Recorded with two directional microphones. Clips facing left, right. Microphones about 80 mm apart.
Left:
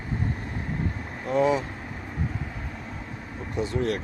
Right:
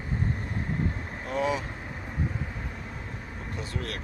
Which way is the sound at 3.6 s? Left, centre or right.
Left.